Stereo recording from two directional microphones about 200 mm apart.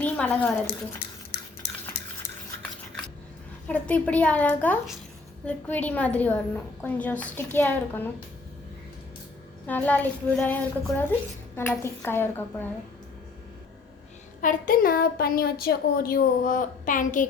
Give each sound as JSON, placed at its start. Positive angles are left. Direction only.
{"t": 0.0, "sound": "a woman's voice", "side_deg": 5}
{"t": 3.7, "sound": "a woman's voice", "side_deg": 5}
{"t": 9.6, "sound": "a woman's voice", "side_deg": 10}
{"t": 14.4, "sound": "a woman's voice", "side_deg": 45}